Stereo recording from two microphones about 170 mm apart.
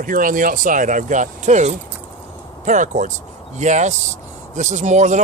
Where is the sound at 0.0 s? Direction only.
55° right (ahead or behind).